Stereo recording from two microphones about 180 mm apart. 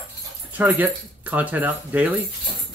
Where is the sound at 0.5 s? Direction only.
10° right (ahead or behind).